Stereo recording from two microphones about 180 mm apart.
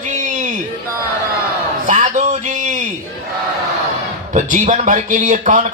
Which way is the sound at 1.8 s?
45° right (ahead or behind).